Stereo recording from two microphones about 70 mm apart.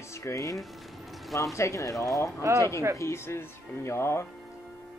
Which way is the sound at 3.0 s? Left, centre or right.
Left.